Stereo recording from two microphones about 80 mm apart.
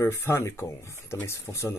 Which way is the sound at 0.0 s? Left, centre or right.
Left.